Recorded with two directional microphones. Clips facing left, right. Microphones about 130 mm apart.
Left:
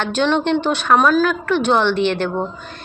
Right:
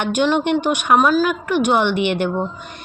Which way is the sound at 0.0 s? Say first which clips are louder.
Even; 10° right (ahead or behind).